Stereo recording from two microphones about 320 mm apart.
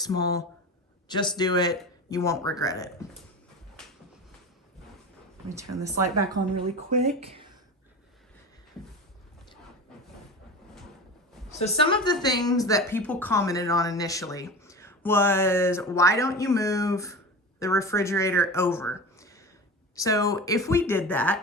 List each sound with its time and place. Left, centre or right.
0.0 s speech: centre
6.4 s speech: right
6.7 s speech: centre
11.6 s speech: centre